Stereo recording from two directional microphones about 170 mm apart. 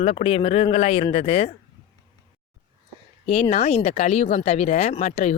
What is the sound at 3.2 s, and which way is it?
Speech, 45° left (ahead or behind).